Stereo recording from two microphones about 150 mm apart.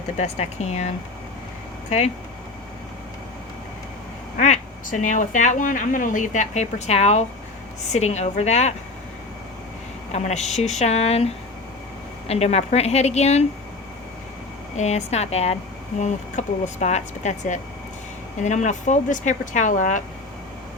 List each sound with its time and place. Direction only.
0.2 s speech: 50° left (ahead or behind)
4.4 s speech: 55° left (ahead or behind)
10.1 s speech: 45° left (ahead or behind)
14.8 s speech: 50° left (ahead or behind)